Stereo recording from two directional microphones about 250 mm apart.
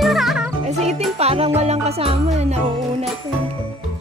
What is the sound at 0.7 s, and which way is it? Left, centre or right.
Music, right.